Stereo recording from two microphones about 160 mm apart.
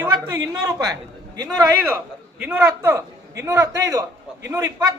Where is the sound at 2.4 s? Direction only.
10° right (ahead or behind).